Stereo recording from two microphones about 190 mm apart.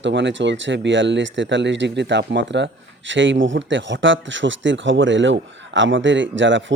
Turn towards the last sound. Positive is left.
turn(degrees=-80)